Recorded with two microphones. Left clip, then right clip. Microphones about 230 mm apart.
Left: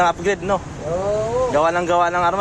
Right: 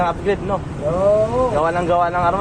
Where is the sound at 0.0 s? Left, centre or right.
Left.